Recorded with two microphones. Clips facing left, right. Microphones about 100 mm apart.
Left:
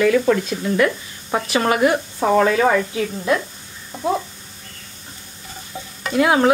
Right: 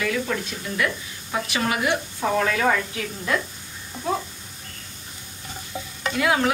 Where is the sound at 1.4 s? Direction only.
45° left (ahead or behind).